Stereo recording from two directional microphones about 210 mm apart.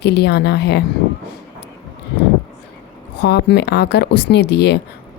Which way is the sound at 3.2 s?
55° left (ahead or behind).